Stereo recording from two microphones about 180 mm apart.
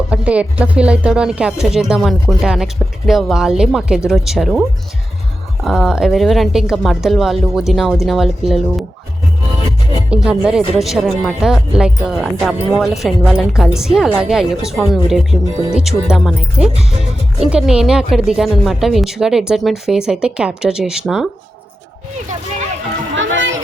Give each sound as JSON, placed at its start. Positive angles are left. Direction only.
{"t": 0.1, "sound": "speech", "side_deg": -5}
{"t": 5.6, "sound": "speech", "side_deg": 0}
{"t": 10.1, "sound": "speech", "side_deg": -5}
{"t": 23.1, "sound": "a sound", "side_deg": -90}